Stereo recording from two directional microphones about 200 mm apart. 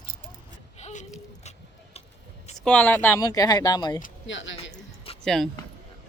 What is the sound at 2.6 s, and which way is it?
Speech, 5° left (ahead or behind).